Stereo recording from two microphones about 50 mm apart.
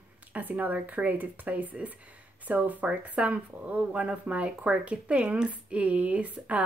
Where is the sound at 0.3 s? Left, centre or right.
Right.